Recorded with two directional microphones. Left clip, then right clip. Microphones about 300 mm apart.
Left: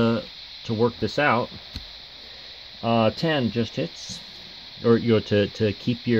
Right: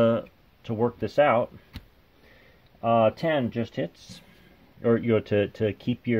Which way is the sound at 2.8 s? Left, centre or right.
Left.